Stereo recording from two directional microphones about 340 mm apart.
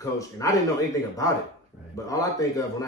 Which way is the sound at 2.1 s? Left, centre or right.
Centre.